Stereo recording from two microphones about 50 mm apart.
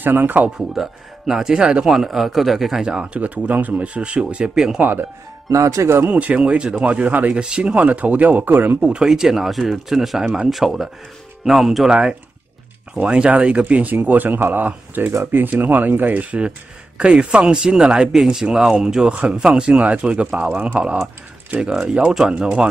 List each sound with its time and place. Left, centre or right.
0.0 s speech: right
0.6 s speech: centre
2.0 s a man's voice: centre
2.8 s speech: centre
5.5 s speech: right
6.1 s speech: right
7.3 s speech: centre; by 8.8 s right
8.8 s a man's voice: centre
13.0 s speech: right
21.5 s speech: centre